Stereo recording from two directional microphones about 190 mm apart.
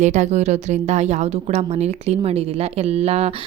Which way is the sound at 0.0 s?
40° right (ahead or behind).